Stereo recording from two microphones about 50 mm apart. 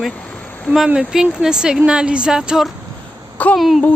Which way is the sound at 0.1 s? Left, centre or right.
Left.